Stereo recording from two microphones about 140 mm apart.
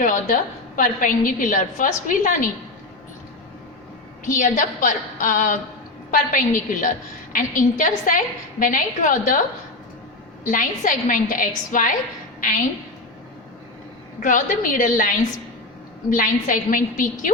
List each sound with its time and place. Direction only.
0.0 s a woman's voice: 70° left (ahead or behind)
4.3 s a woman's voice: 65° left (ahead or behind)
10.4 s a woman's voice: 75° left (ahead or behind)
14.2 s a woman's voice: 70° left (ahead or behind)